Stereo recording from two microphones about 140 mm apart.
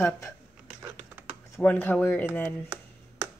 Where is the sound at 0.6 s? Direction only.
15° right (ahead or behind).